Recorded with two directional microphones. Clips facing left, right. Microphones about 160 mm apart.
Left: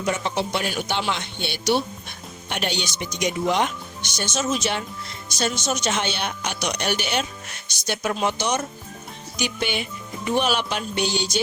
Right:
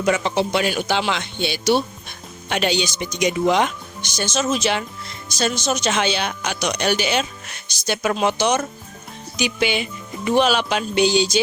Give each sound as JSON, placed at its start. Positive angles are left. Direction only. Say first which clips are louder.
{"t": 0.0, "sound": "speech", "louder": "right 5 dB", "side_deg": -90}